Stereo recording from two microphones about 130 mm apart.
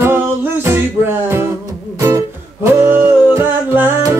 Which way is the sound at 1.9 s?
25° right (ahead or behind).